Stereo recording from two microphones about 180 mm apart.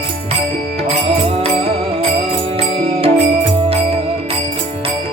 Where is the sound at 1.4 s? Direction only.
35° right (ahead or behind).